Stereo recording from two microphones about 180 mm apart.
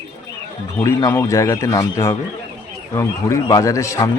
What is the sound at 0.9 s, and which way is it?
Speech, 15° left (ahead or behind).